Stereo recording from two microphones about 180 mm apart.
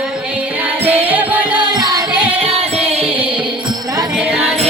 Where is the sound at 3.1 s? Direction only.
5° right (ahead or behind).